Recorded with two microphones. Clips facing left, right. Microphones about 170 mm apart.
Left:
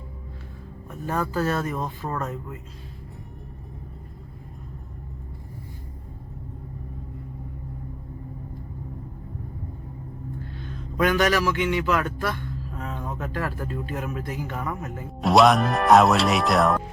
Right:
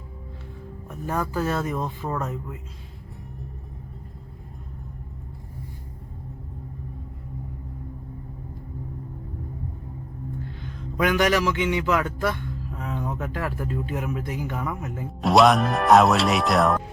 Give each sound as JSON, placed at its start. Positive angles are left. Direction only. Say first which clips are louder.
{"t": 0.9, "sound": "speech", "louder": "even", "side_deg": -10}
{"t": 11.0, "sound": "speech", "louder": "even", "side_deg": -15}
{"t": 12.3, "sound": "a sound", "louder": "right 1 dB", "side_deg": -5}
{"t": 12.9, "sound": "speech", "louder": "right 3 dB", "side_deg": -15}
{"t": 15.2, "sound": "speech", "louder": "even", "side_deg": 0}